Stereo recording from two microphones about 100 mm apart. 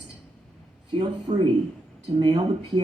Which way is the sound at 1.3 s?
90° right.